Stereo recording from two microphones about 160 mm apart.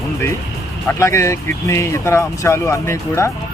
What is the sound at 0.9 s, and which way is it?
Speech, 15° left (ahead or behind).